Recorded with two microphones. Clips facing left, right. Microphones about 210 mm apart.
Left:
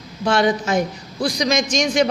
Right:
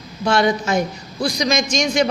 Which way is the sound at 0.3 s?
10° right (ahead or behind).